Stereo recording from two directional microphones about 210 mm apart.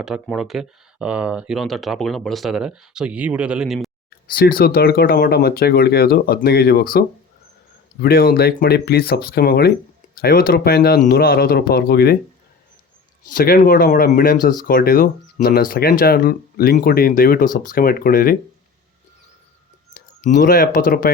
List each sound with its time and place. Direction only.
0.0 s speech: centre (ahead or behind)
4.3 s speech: 45° left (ahead or behind)
8.0 s speech: 45° left (ahead or behind)
13.2 s speech: 40° left (ahead or behind)
19.9 s speech: 40° left (ahead or behind)